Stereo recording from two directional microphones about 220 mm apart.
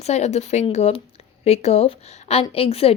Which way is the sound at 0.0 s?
30° left (ahead or behind).